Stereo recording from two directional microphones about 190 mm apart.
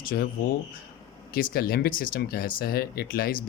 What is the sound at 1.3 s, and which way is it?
Speech, 50° left (ahead or behind).